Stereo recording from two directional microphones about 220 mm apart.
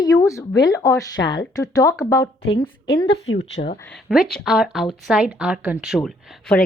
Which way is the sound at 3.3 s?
55° left (ahead or behind).